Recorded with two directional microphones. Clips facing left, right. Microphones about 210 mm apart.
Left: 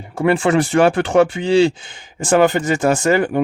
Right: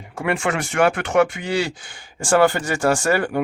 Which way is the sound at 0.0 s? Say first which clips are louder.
Left 7 dB; 30° left (ahead or behind).